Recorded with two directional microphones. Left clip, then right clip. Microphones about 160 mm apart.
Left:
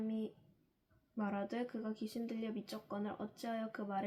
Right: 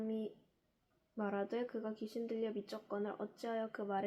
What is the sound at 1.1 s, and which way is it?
Speech, 15° right (ahead or behind).